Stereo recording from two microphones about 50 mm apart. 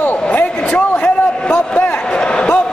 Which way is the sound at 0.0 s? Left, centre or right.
Left.